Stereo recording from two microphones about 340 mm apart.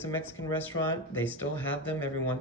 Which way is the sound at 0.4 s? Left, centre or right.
Left.